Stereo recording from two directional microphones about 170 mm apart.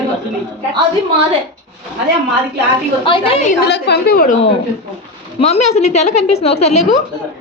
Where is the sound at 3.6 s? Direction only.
80° left; by 4.4 s 60° left (ahead or behind).